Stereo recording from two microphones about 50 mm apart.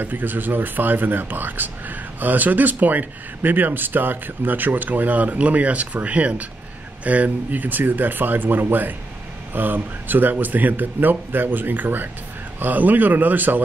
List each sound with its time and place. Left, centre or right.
0.0 s speech: right